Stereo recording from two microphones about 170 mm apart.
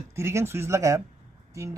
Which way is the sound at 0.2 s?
15° right (ahead or behind).